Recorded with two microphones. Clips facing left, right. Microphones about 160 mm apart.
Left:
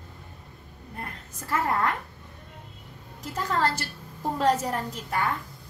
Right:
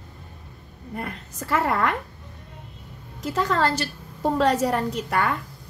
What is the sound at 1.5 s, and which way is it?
Speech, 80° right.